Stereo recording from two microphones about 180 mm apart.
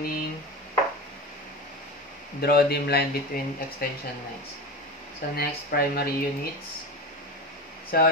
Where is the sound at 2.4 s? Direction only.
60° left (ahead or behind).